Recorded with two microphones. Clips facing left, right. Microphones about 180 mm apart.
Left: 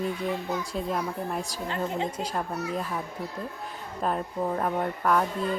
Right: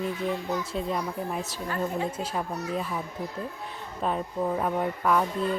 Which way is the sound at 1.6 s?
20° left (ahead or behind).